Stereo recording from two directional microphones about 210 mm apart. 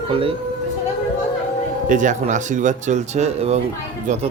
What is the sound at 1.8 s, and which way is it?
Speech, 35° right (ahead or behind).